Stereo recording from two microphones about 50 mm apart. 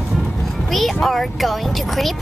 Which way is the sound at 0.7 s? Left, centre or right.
Centre.